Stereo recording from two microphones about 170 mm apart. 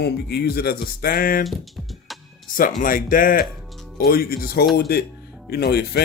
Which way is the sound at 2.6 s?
55° left (ahead or behind).